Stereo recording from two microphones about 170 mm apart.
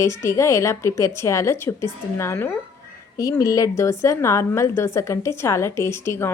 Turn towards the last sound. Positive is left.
turn(degrees=15)  # may be behind; listen again after turning